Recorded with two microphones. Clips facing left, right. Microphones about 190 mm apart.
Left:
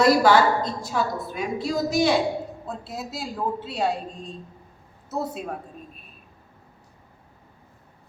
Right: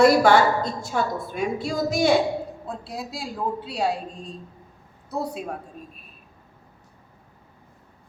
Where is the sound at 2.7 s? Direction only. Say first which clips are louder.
Even; centre (ahead or behind).